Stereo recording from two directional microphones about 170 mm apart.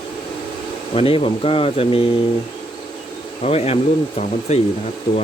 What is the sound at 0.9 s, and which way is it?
Speech, 35° left (ahead or behind).